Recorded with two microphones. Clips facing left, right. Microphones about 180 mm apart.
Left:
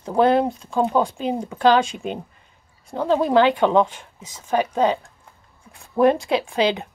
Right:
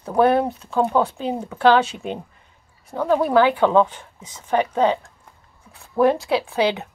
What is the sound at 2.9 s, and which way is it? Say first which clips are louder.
Speech: even; 20° left (ahead or behind).